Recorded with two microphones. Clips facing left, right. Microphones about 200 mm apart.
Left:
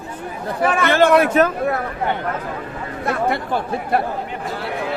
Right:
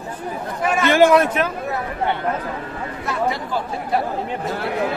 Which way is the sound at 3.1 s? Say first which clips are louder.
Left 3 dB; 60° left (ahead or behind).